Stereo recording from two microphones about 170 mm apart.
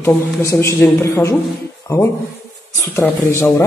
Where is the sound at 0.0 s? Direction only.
15° left (ahead or behind).